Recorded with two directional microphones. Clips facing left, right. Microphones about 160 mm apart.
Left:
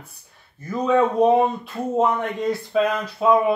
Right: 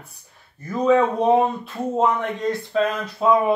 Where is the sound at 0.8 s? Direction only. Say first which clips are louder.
Even; centre (ahead or behind).